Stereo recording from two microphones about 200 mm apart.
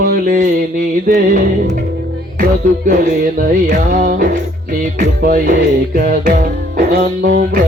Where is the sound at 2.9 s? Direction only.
45° right (ahead or behind).